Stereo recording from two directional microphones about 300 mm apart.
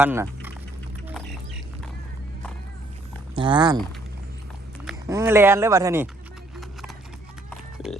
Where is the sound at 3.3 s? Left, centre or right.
Centre.